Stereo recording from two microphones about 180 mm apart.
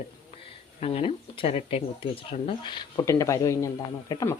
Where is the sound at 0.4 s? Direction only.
30° left (ahead or behind).